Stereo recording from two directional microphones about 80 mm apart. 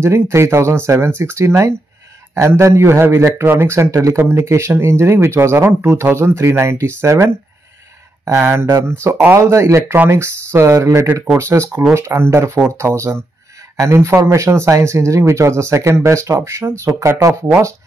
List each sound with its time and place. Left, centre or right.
0.0 s a man's voice: right